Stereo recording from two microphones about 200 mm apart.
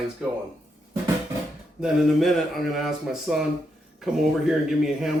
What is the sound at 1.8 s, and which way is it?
Speech, centre (ahead or behind).